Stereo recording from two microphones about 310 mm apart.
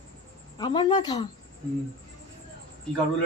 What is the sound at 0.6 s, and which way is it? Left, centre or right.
Speech, centre.